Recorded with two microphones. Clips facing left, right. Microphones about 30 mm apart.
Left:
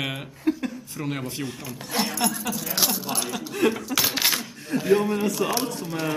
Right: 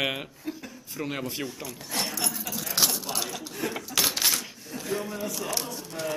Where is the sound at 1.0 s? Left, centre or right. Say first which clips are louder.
Left 1 dB; centre.